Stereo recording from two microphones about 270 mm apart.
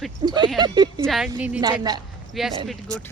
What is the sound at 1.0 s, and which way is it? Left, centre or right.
Speech, centre.